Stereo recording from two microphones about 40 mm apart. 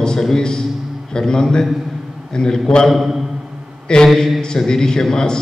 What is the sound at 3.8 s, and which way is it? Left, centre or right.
A man's voice, centre.